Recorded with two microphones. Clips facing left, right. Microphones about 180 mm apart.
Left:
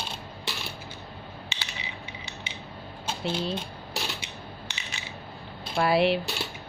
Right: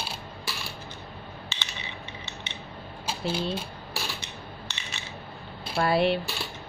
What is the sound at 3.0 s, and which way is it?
Speech, 5° right (ahead or behind).